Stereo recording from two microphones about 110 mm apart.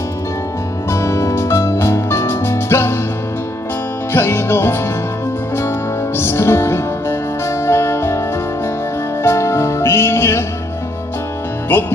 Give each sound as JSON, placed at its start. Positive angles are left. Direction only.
{"t": 0.9, "sound": "music", "side_deg": 25}
{"t": 4.1, "sound": "music", "side_deg": 20}
{"t": 6.1, "sound": "music", "side_deg": 20}
{"t": 9.2, "sound": "music", "side_deg": 25}
{"t": 11.7, "sound": "music", "side_deg": 20}